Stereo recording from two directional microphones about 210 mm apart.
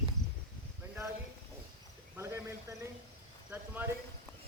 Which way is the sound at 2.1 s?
10° right (ahead or behind).